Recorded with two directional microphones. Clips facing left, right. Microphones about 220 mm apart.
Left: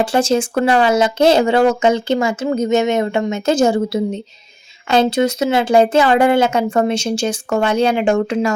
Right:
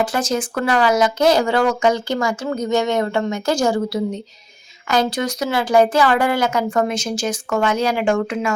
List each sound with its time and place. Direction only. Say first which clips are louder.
0.0 s speech: left 5 dB; 30° left (ahead or behind)